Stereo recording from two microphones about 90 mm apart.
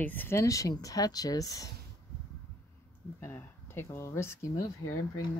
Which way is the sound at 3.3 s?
30° left (ahead or behind).